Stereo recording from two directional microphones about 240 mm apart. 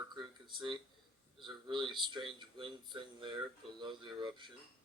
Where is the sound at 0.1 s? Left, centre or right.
Centre.